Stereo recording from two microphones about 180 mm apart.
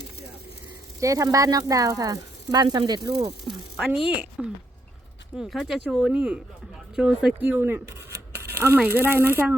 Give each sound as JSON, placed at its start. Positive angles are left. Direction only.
{"t": 0.9, "sound": "speech", "side_deg": -20}
{"t": 3.4, "sound": "speech", "side_deg": 0}